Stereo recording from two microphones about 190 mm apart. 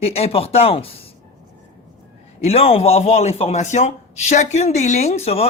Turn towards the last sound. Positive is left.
turn(degrees=35)  # may be behind; listen again after turning